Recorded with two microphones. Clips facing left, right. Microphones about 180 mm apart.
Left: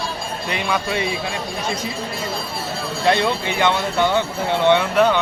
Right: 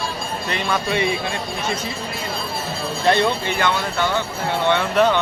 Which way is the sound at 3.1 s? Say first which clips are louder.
Even; 20° left (ahead or behind).